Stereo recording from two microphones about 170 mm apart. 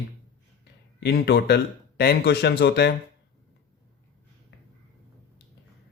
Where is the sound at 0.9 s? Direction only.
80° left.